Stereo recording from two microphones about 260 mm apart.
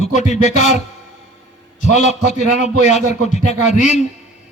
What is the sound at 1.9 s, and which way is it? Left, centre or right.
A man's voice, left.